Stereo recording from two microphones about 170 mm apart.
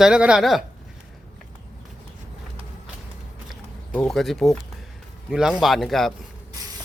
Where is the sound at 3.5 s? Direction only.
5° left (ahead or behind).